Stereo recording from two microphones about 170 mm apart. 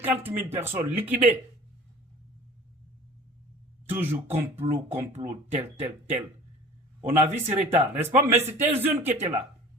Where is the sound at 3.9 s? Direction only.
10° right (ahead or behind).